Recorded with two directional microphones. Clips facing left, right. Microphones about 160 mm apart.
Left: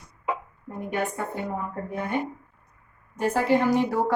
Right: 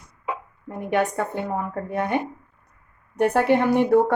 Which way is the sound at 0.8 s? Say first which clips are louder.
Right 6 dB; 80° right.